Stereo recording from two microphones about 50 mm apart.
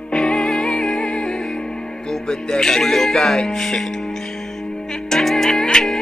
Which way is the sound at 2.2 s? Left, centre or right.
Centre.